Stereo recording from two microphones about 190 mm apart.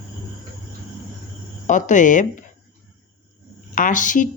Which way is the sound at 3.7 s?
45° left (ahead or behind).